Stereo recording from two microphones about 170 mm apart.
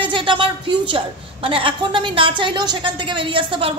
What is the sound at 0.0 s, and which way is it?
A woman's voice, 30° right (ahead or behind).